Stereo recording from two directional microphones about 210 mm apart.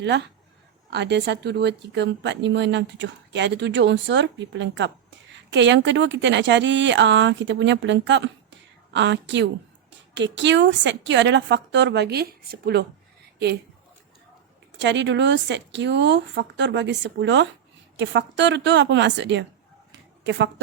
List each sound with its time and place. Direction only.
0.9 s speech: 55° right (ahead or behind)
14.8 s speech: 55° right (ahead or behind)